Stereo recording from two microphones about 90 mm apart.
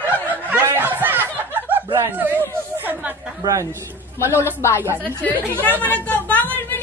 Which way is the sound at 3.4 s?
40° right (ahead or behind).